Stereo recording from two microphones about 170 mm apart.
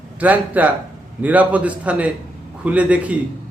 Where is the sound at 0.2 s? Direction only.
10° right (ahead or behind).